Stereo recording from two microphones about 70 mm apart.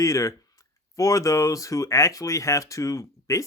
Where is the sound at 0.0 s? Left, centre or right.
Left.